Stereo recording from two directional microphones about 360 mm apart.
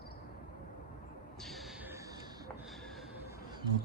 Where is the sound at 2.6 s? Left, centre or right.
Centre.